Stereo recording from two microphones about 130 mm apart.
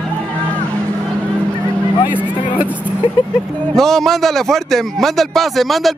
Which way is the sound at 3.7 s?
Centre (ahead or behind).